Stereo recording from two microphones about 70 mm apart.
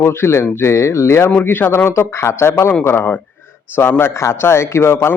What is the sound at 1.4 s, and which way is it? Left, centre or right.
A man's voice, left.